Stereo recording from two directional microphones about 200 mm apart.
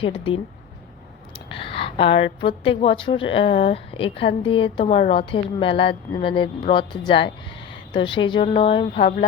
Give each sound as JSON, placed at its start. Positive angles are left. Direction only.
{"t": 0.0, "sound": "a woman's voice", "side_deg": 30}
{"t": 1.5, "sound": "a woman's voice", "side_deg": 25}